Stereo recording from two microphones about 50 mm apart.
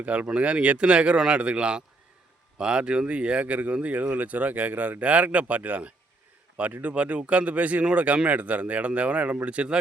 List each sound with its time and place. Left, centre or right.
0.0 s speech: right